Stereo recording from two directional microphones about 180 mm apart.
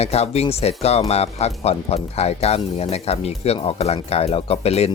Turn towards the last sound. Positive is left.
turn(degrees=35)  # may be behind; listen again after turning